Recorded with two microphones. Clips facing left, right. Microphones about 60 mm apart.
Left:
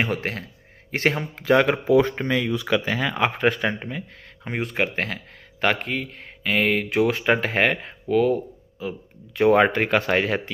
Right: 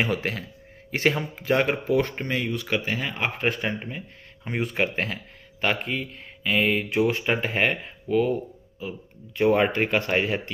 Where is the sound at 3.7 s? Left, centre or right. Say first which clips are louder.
Left 3 dB; left.